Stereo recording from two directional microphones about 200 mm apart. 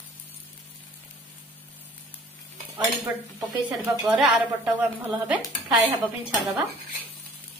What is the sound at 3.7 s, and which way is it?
Speech, centre (ahead or behind).